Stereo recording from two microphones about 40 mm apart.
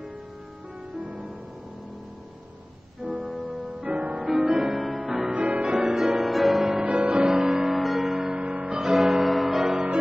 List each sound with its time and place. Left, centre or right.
0.9 s music: right
3.0 s keyboard: right
3.4 s music: right
6.2 s music: centre
6.8 s music: right
8.7 s music: right
9.0 s music: centre
9.7 s music: right